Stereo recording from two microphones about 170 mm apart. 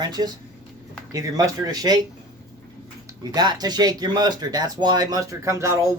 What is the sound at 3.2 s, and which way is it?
Speech, 25° right (ahead or behind).